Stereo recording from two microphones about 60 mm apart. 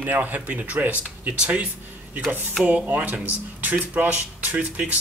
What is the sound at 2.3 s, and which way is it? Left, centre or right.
Speech, right.